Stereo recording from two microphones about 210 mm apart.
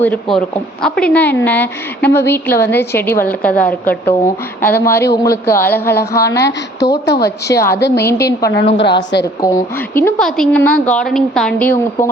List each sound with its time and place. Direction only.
0.0 s a woman's voice: 5° left (ahead or behind)
6.7 s a woman's voice: 55° left (ahead or behind)
7.5 s a woman's voice: 15° left (ahead or behind)
7.8 s a woman's voice: 55° left (ahead or behind)
8.0 s a woman's voice: 15° left (ahead or behind)
8.5 s a woman's voice: 55° left (ahead or behind)
9.4 s a woman's voice: 10° left (ahead or behind)